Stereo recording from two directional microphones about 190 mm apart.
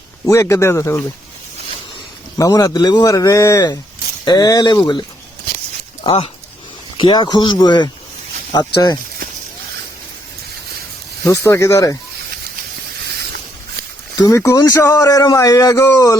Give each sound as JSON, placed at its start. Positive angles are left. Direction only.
{"t": 0.3, "sound": "a man's voice", "side_deg": 15}
{"t": 2.4, "sound": "a man's voice", "side_deg": 20}
{"t": 11.3, "sound": "a man's voice", "side_deg": 15}
{"t": 14.2, "sound": "a man's voice", "side_deg": 15}